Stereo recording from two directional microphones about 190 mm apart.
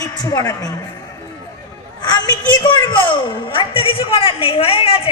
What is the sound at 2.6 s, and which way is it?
A man's voice, 20° left (ahead or behind).